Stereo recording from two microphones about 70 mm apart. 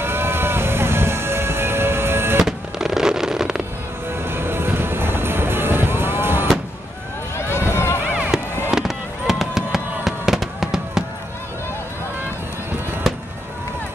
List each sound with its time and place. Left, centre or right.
0.0 s music: right
2.4 s fireworks: centre
4.2 s music: right
7.3 s a sound: left
8.3 s fireworks: centre